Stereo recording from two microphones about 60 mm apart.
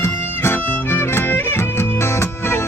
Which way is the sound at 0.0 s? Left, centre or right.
Left.